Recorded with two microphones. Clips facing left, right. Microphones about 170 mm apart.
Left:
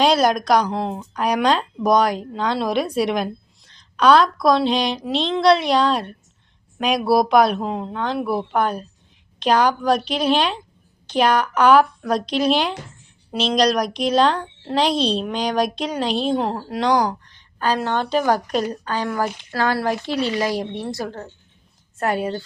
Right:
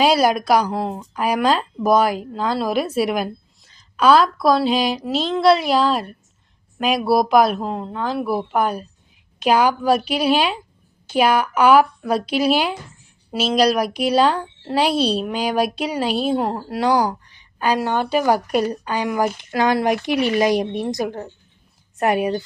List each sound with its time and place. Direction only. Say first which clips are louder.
0.0 s a woman's voice: right 1 dB; 5° right (ahead or behind)